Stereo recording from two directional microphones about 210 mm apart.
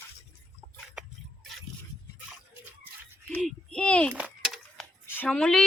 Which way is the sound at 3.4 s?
Centre (ahead or behind).